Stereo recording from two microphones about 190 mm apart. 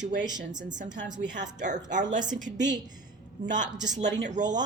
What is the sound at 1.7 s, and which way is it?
Speech, 40° right (ahead or behind).